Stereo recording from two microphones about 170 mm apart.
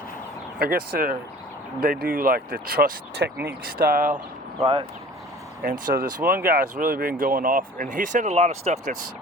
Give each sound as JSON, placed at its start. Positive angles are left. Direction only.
{"t": 0.6, "sound": "speech", "side_deg": -60}
{"t": 4.6, "sound": "speech", "side_deg": -35}
{"t": 5.8, "sound": "speech", "side_deg": -55}